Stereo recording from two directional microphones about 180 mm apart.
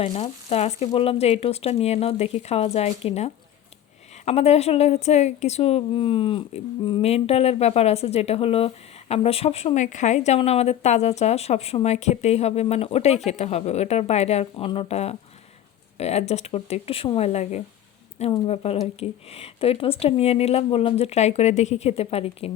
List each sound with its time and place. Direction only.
0.0 s a woman's voice: 35° left (ahead or behind)